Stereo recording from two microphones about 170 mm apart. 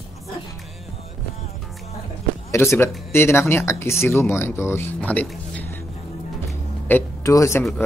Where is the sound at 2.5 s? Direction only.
15° left (ahead or behind).